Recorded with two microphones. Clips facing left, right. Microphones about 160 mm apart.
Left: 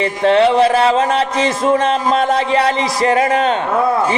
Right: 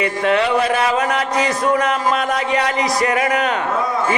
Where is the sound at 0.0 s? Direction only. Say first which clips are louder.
Left 5 dB; 30° left (ahead or behind).